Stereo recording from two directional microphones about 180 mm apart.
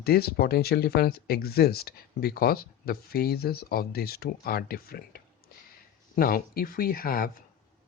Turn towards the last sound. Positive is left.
turn(degrees=55)  # may be behind; listen again after turning